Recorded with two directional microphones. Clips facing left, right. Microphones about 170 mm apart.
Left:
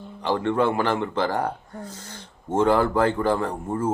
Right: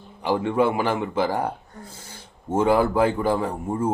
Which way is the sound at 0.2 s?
10° right (ahead or behind).